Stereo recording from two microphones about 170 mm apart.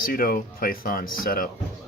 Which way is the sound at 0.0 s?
60° left (ahead or behind).